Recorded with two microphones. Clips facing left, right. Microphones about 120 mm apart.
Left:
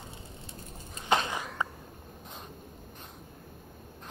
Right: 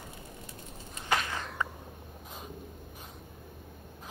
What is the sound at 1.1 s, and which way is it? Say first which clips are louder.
Walk: left 3 dB; 25° left (ahead or behind).